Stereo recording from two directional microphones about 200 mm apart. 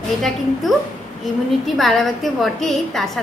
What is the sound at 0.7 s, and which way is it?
A woman's voice, centre (ahead or behind).